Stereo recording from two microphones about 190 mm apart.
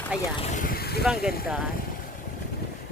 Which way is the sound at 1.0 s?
5° right (ahead or behind).